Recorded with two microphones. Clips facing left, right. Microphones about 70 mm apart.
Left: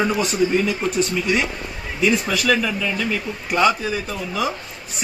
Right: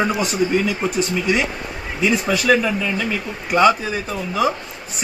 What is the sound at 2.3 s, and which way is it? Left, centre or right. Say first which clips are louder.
A man's voice: right 3 dB; right.